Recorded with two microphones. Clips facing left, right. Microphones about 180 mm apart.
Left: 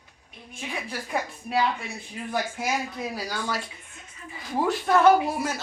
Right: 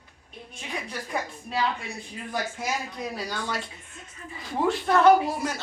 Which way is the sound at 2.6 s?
5° left (ahead or behind).